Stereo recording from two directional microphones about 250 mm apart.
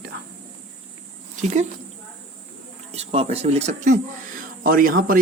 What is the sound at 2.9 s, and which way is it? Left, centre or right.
A man's voice, right.